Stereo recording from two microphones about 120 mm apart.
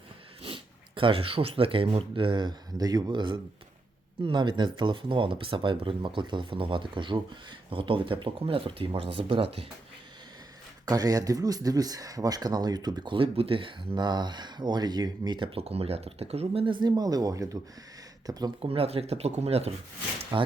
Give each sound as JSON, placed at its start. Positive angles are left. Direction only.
{"t": 0.4, "sound": "speech", "side_deg": -45}
{"t": 10.8, "sound": "speech", "side_deg": -30}
{"t": 18.6, "sound": "speech", "side_deg": -50}
{"t": 20.3, "sound": "speech", "side_deg": -45}